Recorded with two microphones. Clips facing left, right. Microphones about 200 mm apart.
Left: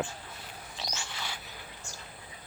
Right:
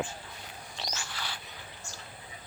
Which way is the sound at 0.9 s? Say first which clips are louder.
Even; 20° left (ahead or behind).